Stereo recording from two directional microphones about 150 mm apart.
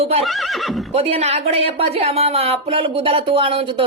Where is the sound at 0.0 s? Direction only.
45° right (ahead or behind).